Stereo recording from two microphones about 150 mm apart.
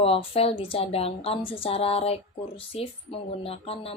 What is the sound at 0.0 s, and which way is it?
Speech, 40° left (ahead or behind).